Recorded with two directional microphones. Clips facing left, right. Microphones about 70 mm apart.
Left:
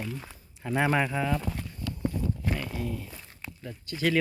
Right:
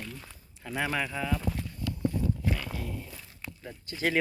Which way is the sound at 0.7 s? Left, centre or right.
Left.